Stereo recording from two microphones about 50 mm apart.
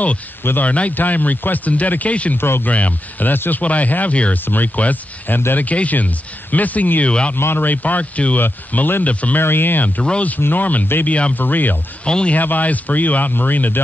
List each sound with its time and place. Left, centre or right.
0.7 s speech: left
2.3 s speech: left
2.6 s speech: left
7.1 s speech: left
7.3 s speech: left
7.6 s speech: left
8.4 s speech: left
11.3 s speech: left
12.1 s speech: centre
12.4 s speech: left